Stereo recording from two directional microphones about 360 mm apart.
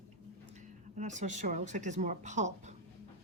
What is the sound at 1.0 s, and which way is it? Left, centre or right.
Speech, centre.